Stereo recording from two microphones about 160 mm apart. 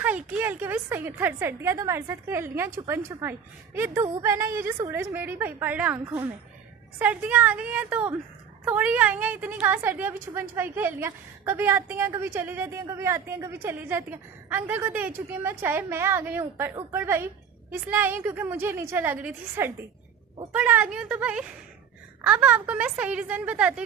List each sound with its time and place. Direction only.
0.3 s a woman's voice: 10° right (ahead or behind)
7.0 s a woman's voice: 10° right (ahead or behind)